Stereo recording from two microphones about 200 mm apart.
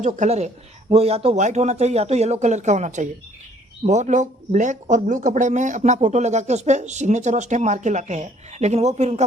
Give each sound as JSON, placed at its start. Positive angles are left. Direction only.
{"t": 0.0, "sound": "speech", "side_deg": -35}